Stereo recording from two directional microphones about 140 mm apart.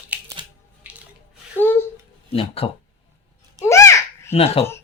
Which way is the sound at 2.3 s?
40° left (ahead or behind).